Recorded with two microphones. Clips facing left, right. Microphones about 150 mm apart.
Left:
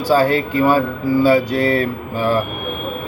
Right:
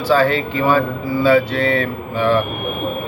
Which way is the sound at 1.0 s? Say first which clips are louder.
Left 3 dB; 40° left (ahead or behind).